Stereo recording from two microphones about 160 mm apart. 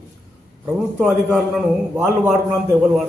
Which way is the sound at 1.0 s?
5° right (ahead or behind).